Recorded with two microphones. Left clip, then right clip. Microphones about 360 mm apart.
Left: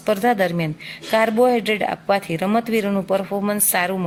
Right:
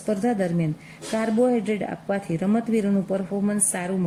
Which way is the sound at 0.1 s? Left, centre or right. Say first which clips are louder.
Left 7 dB; left.